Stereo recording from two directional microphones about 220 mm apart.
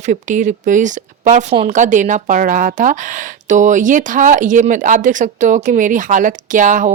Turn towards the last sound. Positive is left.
turn(degrees=-35)  # may be behind; listen again after turning